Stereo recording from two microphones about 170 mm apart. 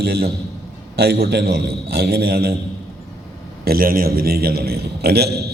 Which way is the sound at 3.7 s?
60° right (ahead or behind).